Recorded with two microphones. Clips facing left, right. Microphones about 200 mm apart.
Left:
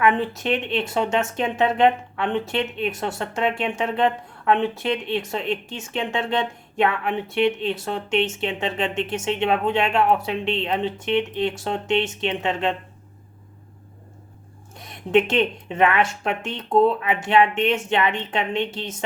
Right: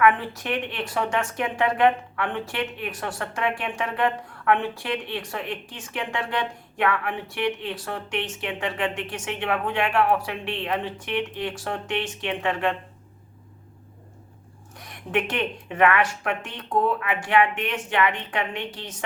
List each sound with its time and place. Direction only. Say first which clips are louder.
0.0 s speech: left 1 dB; 25° left (ahead or behind)
14.8 s speech: left 7 dB; 25° left (ahead or behind)